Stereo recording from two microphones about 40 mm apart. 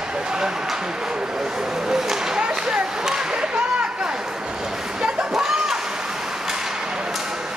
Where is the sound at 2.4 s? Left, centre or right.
Right.